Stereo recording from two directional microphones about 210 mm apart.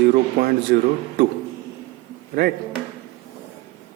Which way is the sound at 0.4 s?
40° right (ahead or behind).